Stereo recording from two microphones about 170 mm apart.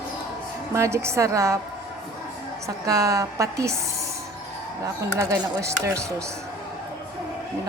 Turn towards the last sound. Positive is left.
turn(degrees=-15)  # may be behind; listen again after turning